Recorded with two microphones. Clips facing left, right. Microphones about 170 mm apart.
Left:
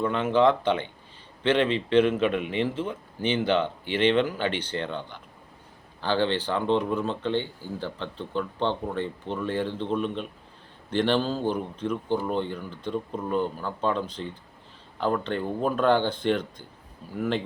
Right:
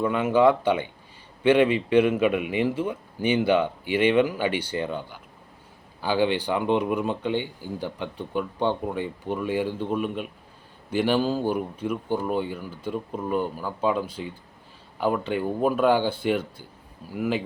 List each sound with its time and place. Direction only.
0.0 s speech: 10° right (ahead or behind)